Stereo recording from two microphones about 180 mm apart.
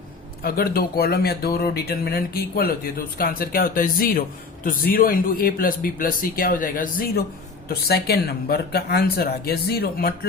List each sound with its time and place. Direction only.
0.4 s speech: 55° left (ahead or behind)